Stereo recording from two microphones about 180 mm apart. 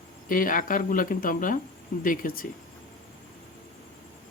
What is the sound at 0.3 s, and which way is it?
Speech, 50° left (ahead or behind).